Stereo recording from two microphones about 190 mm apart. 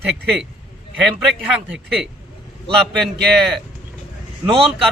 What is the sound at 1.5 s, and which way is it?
A man's voice, 5° right (ahead or behind).